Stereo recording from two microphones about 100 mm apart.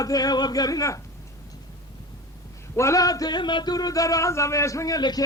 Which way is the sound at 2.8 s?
35° left (ahead or behind).